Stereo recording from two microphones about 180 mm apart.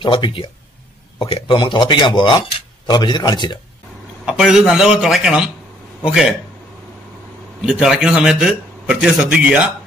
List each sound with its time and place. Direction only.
0.0 s speech: 30° left (ahead or behind)
4.3 s a man's voice: 5° right (ahead or behind)
7.6 s a man's voice: 5° right (ahead or behind)